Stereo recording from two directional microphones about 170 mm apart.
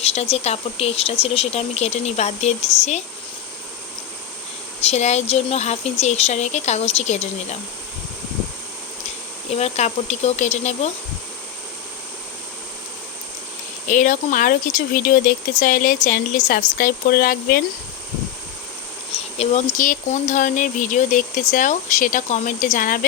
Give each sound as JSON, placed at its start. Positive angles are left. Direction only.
{"t": 0.0, "sound": "speech", "side_deg": 35}
{"t": 4.8, "sound": "speech", "side_deg": 40}
{"t": 9.5, "sound": "speech", "side_deg": 40}
{"t": 13.8, "sound": "speech", "side_deg": 50}
{"t": 19.1, "sound": "speech", "side_deg": 35}